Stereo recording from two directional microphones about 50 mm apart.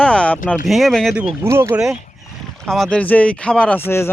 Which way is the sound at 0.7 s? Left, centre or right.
Centre.